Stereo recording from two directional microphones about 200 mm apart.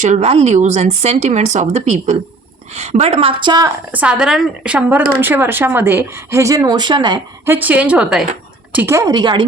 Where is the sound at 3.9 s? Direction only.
5° right (ahead or behind).